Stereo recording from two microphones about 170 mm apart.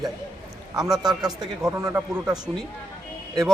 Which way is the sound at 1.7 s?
20° right (ahead or behind).